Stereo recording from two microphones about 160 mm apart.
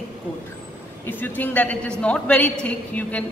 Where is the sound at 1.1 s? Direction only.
10° left (ahead or behind).